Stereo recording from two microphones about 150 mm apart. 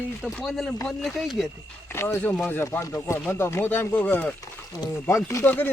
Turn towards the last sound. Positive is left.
turn(degrees=15)  # may be behind; listen again after turning